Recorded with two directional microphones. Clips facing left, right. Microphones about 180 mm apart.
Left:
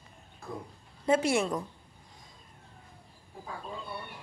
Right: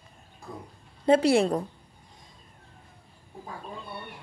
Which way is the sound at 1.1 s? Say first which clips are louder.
Right 6 dB; 35° right (ahead or behind).